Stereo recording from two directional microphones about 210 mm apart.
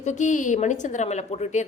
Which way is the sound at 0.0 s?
35° left (ahead or behind).